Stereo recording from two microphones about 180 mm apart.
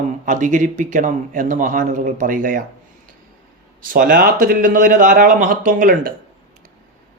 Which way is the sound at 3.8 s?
50° right (ahead or behind).